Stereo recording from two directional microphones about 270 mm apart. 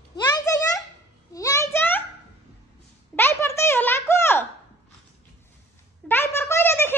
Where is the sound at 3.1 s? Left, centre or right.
Centre.